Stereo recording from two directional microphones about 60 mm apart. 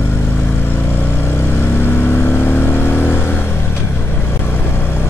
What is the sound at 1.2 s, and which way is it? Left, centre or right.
Vehicle, left.